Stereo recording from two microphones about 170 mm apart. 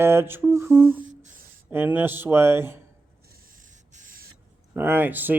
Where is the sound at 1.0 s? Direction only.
50° right (ahead or behind).